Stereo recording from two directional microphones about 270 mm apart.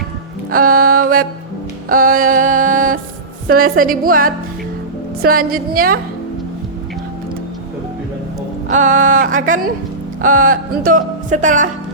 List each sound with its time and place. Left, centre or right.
0.5 s music: right
3.5 s speech: right
8.7 s speech: right